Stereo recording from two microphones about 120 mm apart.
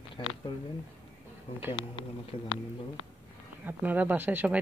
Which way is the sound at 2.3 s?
45° left (ahead or behind).